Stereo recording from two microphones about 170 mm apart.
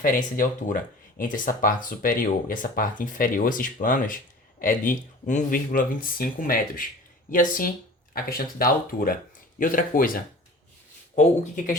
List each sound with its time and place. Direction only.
0.0 s speech: 55° left (ahead or behind)
11.1 s speech: 45° left (ahead or behind)